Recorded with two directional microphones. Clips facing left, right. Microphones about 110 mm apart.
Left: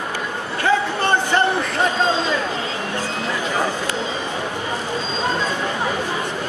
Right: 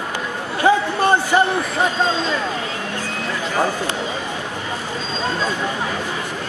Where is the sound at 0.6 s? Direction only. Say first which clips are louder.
Right 3 dB; 15° right (ahead or behind).